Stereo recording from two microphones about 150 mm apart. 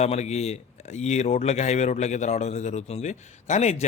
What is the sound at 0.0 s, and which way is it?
Speech, 45° left (ahead or behind).